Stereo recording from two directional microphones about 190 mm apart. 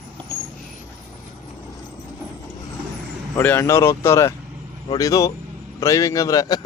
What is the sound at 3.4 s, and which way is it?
A man's voice, 10° left (ahead or behind).